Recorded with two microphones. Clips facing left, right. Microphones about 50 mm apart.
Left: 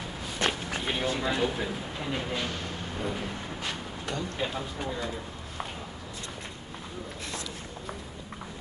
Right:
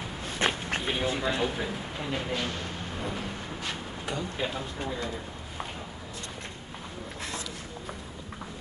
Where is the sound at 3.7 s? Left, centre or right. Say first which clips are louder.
Even; centre.